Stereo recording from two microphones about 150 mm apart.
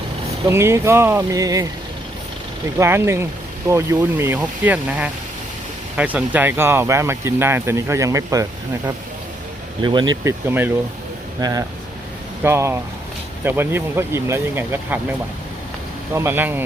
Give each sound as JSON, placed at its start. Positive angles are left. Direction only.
{"t": 0.4, "sound": "speech", "side_deg": -20}
{"t": 2.7, "sound": "speech", "side_deg": -15}
{"t": 9.8, "sound": "speech", "side_deg": -30}
{"t": 10.2, "sound": "speech", "side_deg": -15}
{"t": 11.3, "sound": "speech", "side_deg": -25}
{"t": 16.1, "sound": "speech", "side_deg": -15}